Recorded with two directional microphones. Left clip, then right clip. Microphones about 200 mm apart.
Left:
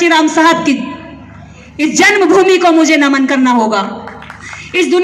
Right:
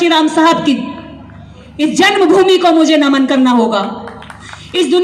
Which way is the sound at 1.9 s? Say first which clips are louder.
Left 1 dB; 25° right (ahead or behind).